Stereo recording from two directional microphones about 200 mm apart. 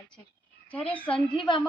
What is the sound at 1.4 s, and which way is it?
Speech, 25° left (ahead or behind).